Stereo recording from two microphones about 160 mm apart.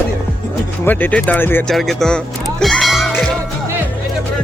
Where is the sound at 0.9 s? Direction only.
10° left (ahead or behind).